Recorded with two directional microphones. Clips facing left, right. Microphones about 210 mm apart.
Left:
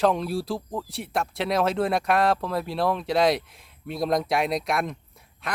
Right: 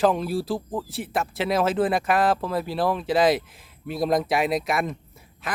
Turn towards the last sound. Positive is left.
turn(degrees=0)  # may be behind; listen again after turning